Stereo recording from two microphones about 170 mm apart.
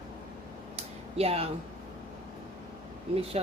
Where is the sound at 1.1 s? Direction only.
35° right (ahead or behind).